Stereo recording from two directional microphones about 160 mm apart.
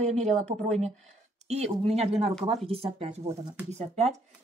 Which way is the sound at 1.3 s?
45° right (ahead or behind).